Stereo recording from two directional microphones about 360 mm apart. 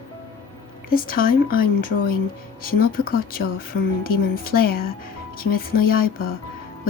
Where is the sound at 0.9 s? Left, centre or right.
Left.